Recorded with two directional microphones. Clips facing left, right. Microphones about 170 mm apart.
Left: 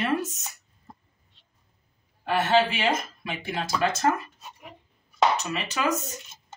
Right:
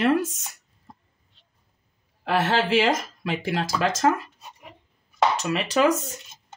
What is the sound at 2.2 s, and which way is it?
Speech, 90° right.